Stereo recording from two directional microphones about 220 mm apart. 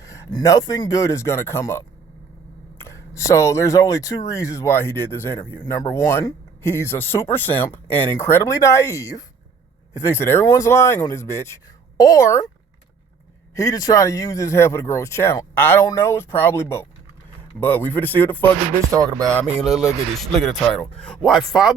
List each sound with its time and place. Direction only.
0.0 s speech: 15° left (ahead or behind)
13.6 s speech: 15° left (ahead or behind)
18.9 s speech: 15° right (ahead or behind)
19.2 s speech: 5° left (ahead or behind)